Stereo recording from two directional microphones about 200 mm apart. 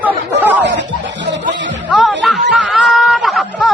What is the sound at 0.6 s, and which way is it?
Music, 60° right (ahead or behind).